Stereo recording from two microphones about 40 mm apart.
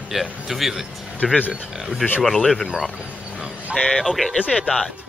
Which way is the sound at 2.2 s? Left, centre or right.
Centre.